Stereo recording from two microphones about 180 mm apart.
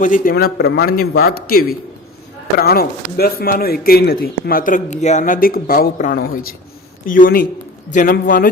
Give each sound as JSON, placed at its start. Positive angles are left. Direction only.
{"t": 0.0, "sound": "a man's voice", "side_deg": 50}